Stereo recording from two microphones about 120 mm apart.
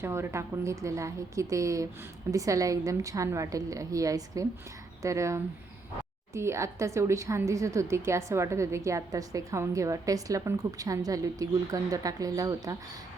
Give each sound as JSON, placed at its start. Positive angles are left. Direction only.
{"t": 0.0, "sound": "a woman's voice", "side_deg": -20}